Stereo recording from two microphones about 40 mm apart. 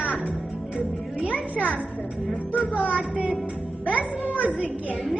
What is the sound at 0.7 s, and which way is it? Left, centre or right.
Speech, right.